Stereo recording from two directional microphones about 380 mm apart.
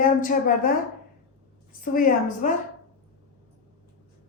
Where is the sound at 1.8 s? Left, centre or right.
Left.